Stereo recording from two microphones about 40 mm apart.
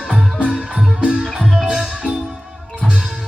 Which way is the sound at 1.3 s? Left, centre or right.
Centre.